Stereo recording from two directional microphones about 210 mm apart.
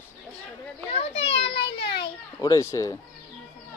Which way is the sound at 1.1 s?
60° left (ahead or behind).